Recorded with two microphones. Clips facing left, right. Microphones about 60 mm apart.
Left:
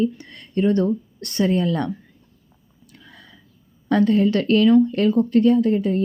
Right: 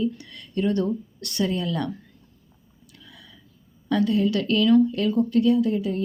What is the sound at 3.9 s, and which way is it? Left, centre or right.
Speech, left.